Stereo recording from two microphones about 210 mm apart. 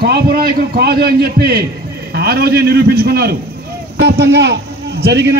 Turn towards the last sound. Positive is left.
turn(degrees=-55)  # may be behind; listen again after turning